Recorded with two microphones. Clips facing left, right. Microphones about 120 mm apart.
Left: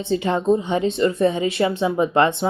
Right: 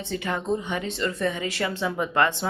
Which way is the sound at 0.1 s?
20° left (ahead or behind).